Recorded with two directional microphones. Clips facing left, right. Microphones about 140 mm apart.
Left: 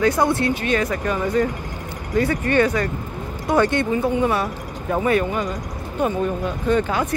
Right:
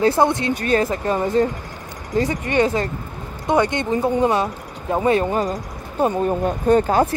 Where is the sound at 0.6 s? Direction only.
35° right (ahead or behind).